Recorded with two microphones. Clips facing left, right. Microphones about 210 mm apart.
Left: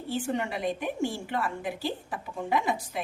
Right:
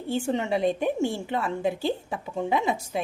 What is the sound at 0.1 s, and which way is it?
Speech, 25° right (ahead or behind).